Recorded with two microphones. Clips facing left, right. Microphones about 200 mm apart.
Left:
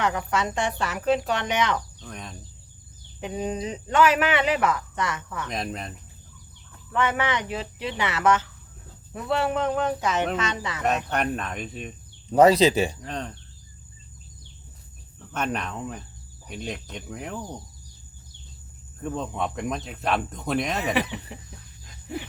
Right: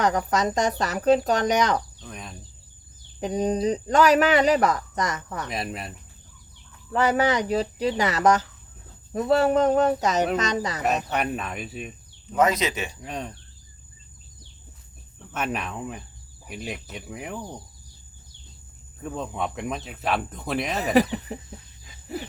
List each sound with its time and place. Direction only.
0.0 s speech: 40° right (ahead or behind)
2.0 s speech: centre (ahead or behind)
3.2 s speech: 40° right (ahead or behind)
5.5 s speech: 5° right (ahead or behind)
6.9 s speech: 35° right (ahead or behind)
10.8 s speech: 5° right (ahead or behind)
12.3 s speech: 35° left (ahead or behind)
13.0 s speech: 10° right (ahead or behind)
15.3 s speech: 5° right (ahead or behind)
18.9 s speech: centre (ahead or behind)
21.3 s speech: 40° right (ahead or behind)